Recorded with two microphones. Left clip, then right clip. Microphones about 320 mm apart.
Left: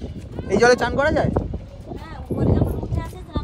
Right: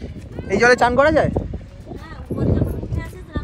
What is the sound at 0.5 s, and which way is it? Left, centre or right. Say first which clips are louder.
Speech: right 3 dB; centre.